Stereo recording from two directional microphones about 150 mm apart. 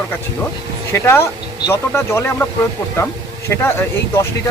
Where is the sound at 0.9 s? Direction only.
15° left (ahead or behind).